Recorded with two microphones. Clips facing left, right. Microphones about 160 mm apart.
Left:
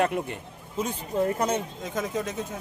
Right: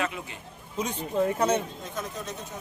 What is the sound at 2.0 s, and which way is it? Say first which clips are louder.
Speech: left 7 dB; 90° left.